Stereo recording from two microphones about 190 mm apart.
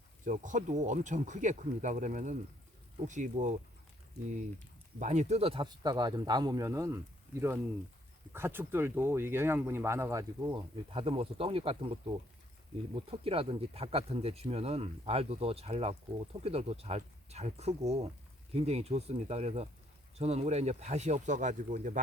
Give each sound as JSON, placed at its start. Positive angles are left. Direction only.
{"t": 0.3, "sound": "speech", "side_deg": -40}
{"t": 4.9, "sound": "speech", "side_deg": -35}
{"t": 10.9, "sound": "speech", "side_deg": -30}